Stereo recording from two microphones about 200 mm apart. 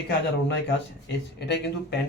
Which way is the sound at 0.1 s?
60° left (ahead or behind).